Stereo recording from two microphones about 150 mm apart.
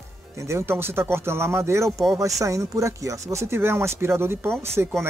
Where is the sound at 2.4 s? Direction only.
20° right (ahead or behind).